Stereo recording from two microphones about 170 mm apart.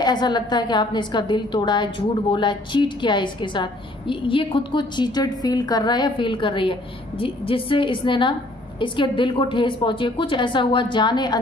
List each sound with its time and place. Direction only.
0.0 s a woman's voice: 25° left (ahead or behind)